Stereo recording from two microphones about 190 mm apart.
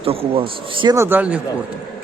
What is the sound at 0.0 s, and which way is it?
Speech, 30° right (ahead or behind).